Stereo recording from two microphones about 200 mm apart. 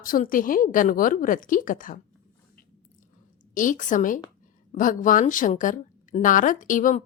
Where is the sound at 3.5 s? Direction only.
40° left (ahead or behind).